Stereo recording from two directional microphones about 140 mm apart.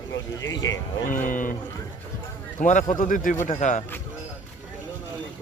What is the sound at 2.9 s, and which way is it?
Speech, 75° left (ahead or behind).